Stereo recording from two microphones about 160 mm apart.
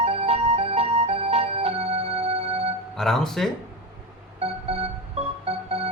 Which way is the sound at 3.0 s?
Centre (ahead or behind).